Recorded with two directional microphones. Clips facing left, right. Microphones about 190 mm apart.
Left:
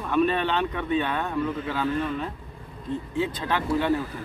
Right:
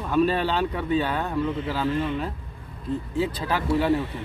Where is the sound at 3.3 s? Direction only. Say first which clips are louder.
Right 1 dB; 5° right (ahead or behind).